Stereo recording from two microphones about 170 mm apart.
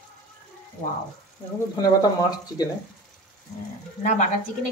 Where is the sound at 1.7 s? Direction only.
20° left (ahead or behind).